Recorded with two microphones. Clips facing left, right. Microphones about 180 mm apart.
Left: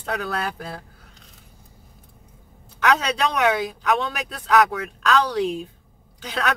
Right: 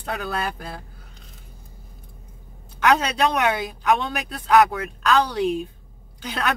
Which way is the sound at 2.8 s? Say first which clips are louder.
Right 2 dB; 5° right (ahead or behind).